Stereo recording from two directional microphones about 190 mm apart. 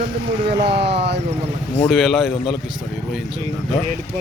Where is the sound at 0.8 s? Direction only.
65° right (ahead or behind).